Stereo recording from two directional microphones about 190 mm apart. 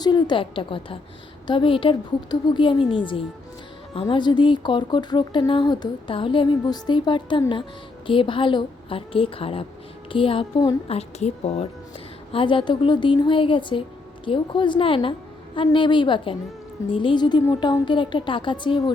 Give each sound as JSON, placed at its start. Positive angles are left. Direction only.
{"t": 0.0, "sound": "speech", "side_deg": 25}